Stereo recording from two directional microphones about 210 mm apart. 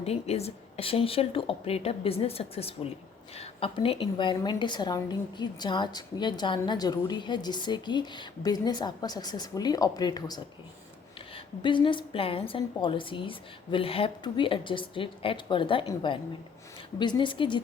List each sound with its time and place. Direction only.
0.0 s a woman's voice: 30° left (ahead or behind)